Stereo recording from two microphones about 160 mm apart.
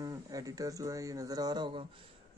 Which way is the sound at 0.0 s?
20° right (ahead or behind).